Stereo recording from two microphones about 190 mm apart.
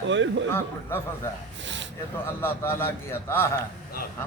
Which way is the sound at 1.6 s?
70° right (ahead or behind).